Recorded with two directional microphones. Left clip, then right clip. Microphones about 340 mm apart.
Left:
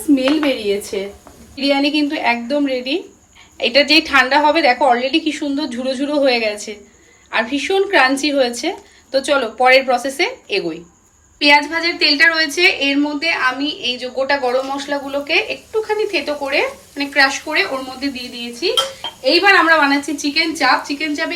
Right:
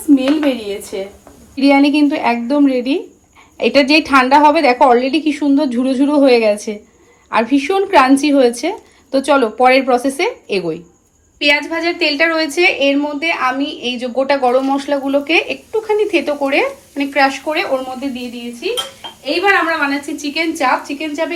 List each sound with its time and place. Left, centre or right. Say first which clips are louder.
0.3 s a woman's voice: even; centre
1.5 s a woman's voice: right 4 dB; centre
11.3 s a woman's voice: left 2 dB; centre
19.2 s a woman's voice: left 2 dB; centre